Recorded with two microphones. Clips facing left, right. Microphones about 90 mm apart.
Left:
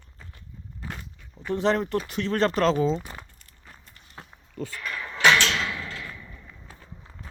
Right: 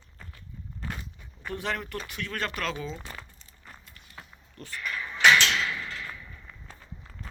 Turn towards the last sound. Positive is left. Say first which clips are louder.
# left 1 dB
turn(degrees=5)  # may be behind; listen again after turning